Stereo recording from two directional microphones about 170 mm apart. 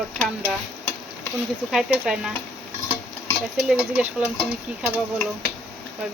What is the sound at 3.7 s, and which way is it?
Speech, 5° right (ahead or behind).